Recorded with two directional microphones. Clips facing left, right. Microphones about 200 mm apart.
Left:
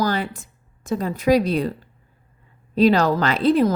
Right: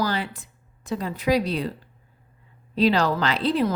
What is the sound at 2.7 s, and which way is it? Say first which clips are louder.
Speech: left 4 dB; 45° left (ahead or behind).